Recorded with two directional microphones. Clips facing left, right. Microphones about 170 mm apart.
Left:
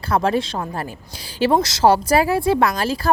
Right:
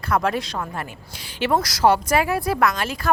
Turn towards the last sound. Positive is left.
turn(degrees=30)  # may be behind; listen again after turning